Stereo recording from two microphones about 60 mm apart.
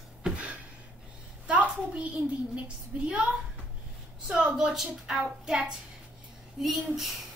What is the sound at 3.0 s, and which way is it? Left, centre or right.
Speech, centre.